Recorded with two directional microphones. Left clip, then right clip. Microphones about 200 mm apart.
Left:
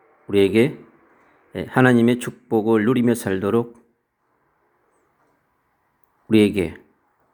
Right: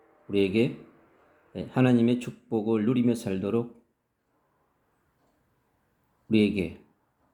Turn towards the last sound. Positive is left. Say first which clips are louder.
# left 8 dB
turn(degrees=30)  # may be behind; listen again after turning